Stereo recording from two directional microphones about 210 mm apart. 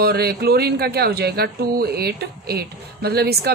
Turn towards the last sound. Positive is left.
turn(degrees=-50)  # may be behind; listen again after turning